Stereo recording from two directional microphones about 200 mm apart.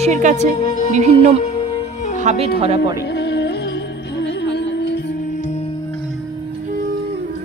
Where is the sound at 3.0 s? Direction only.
55° left (ahead or behind).